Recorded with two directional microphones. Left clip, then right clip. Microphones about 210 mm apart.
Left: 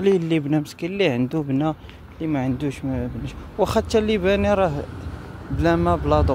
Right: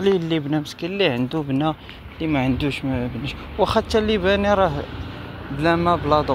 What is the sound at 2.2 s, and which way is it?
Speech, 10° left (ahead or behind).